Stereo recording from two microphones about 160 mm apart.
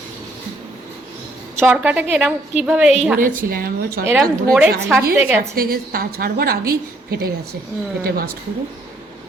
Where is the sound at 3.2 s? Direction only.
60° right (ahead or behind).